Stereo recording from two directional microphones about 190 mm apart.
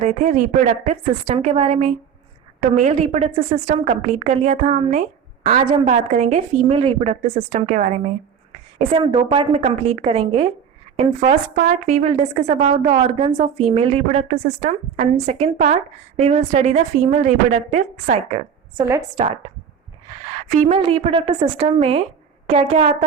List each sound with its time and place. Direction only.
0.0 s a woman's voice: 40° right (ahead or behind)
8.8 s a woman's voice: 25° right (ahead or behind)
18.8 s a woman's voice: 20° right (ahead or behind)
20.6 s a woman's voice: 30° right (ahead or behind)